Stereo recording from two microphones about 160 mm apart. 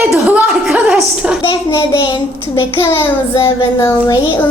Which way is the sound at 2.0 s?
30° left (ahead or behind).